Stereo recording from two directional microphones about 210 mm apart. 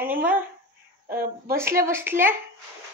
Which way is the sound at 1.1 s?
45° right (ahead or behind).